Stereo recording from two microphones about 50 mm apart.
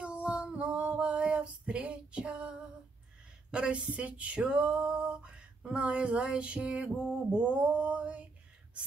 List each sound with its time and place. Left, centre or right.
0.0 s music: right
3.5 s a woman's voice: centre
4.4 s a sound: centre